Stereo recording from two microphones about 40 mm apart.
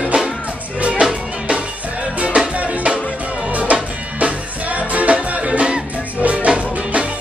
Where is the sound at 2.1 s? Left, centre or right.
Right.